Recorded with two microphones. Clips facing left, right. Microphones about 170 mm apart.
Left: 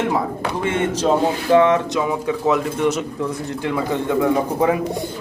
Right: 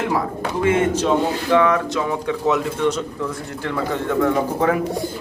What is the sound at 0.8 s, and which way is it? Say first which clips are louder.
A man's voice: even; 35° left (ahead or behind).